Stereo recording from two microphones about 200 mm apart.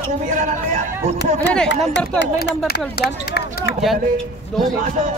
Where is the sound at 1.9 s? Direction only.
60° left (ahead or behind).